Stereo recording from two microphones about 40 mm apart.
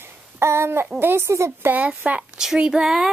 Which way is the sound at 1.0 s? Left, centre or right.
Right.